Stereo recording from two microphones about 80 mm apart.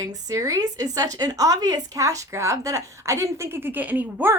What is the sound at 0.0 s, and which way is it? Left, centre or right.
Speech, right.